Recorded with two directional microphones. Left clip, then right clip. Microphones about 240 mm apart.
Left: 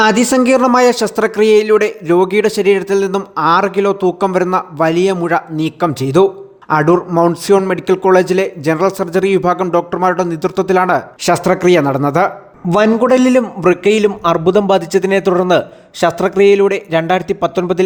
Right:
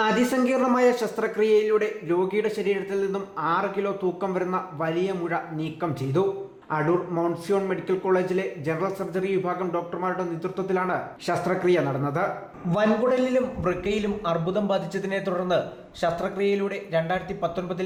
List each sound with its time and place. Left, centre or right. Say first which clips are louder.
0.0 s speech: left 11 dB; left